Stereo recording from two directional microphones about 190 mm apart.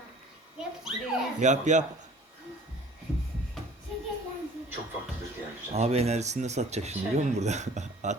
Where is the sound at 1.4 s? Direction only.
40° right (ahead or behind).